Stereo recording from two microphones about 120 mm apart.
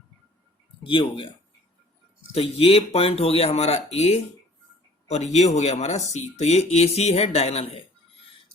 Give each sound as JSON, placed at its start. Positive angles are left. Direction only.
{"t": 0.9, "sound": "speech", "side_deg": 45}
{"t": 2.3, "sound": "speech", "side_deg": 55}